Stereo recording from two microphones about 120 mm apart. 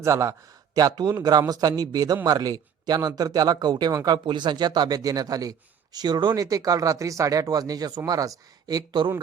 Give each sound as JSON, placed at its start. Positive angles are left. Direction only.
{"t": 0.0, "sound": "a man's voice", "side_deg": -25}